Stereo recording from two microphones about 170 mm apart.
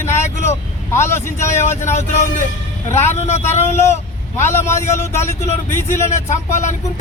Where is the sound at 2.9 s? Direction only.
40° left (ahead or behind).